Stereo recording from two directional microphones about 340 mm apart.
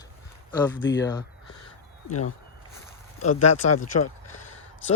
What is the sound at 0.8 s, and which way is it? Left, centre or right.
Speech, left.